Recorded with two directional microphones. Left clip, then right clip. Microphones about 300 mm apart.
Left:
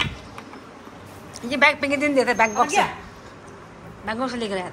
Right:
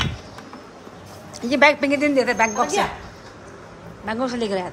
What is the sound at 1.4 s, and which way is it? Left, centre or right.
A woman's voice, centre.